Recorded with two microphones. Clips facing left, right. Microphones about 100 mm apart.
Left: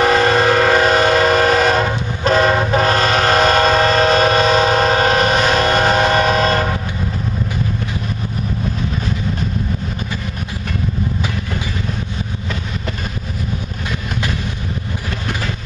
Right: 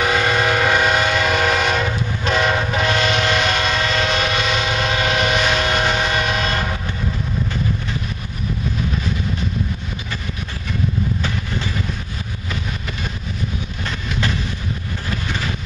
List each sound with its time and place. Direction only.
0.0 s train: 35° left (ahead or behind)